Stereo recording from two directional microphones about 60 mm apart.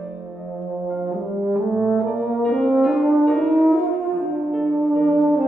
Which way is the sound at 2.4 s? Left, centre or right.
Centre.